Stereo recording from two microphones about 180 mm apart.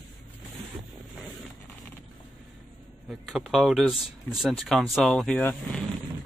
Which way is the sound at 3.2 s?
Centre (ahead or behind).